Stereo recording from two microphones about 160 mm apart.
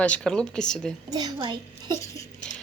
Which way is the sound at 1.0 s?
25° right (ahead or behind).